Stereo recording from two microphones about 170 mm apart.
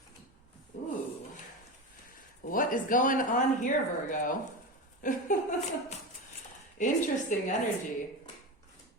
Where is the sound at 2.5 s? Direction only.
50° left (ahead or behind).